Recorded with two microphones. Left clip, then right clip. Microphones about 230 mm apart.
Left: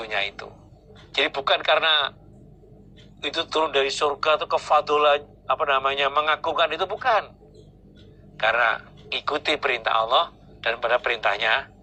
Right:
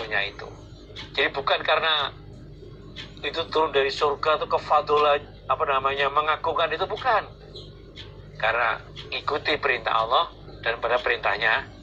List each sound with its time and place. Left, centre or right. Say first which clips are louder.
0.0 s a man's voice: even; left
3.2 s speech: even; left
8.4 s speech: left 2 dB; left